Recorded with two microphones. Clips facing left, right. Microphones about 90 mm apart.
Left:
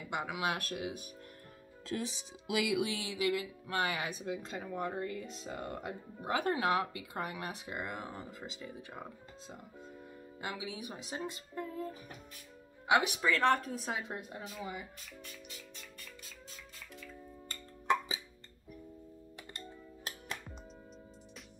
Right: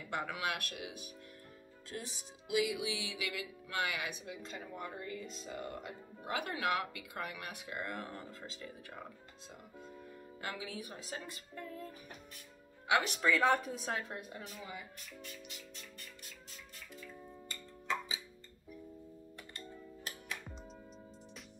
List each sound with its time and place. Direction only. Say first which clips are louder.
0.1 s speech: left 2 dB; 15° left (ahead or behind)
0.6 s speech: left 5 dB; 35° left (ahead or behind)
1.9 s speech: left 7 dB; 90° left; by 2.9 s 75° left (ahead or behind)
2.9 s speech: left 7 dB; 40° left (ahead or behind); by 9.0 s 20° left (ahead or behind)
10.4 s speech: left 2 dB; 15° left (ahead or behind)
13.3 s speech: left 1 dB; 5° right (ahead or behind)
13.9 s speech: left 1 dB; 20° left (ahead or behind)